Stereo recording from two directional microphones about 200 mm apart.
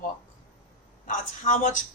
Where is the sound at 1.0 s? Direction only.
40° left (ahead or behind).